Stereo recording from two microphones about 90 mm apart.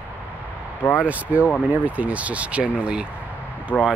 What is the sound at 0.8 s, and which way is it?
Speech, 20° left (ahead or behind).